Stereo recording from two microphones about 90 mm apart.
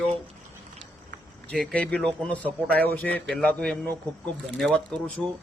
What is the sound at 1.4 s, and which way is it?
A man's voice, 15° left (ahead or behind).